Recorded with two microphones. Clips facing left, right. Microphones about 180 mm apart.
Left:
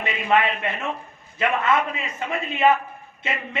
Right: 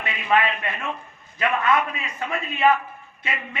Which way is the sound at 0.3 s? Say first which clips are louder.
Even; 25° left (ahead or behind).